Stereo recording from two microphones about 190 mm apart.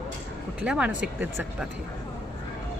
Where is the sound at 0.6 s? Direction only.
5° right (ahead or behind).